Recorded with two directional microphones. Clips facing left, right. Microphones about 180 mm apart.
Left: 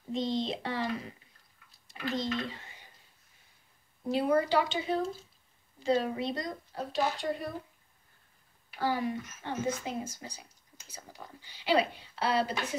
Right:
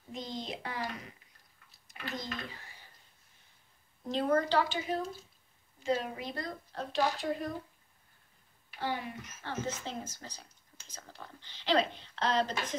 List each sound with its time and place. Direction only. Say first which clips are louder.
0.1 s speech: left 8 dB; 25° left (ahead or behind)
4.0 s speech: left 2 dB; 10° left (ahead or behind)
4.6 s a woman's voice: left 3 dB; 20° left (ahead or behind)
6.3 s speech: left 3 dB; 15° left (ahead or behind)
6.8 s speech: even; 5° left (ahead or behind)
8.7 s speech: left 5 dB; 40° left (ahead or behind)
9.4 s speech: left 2 dB; 15° left (ahead or behind)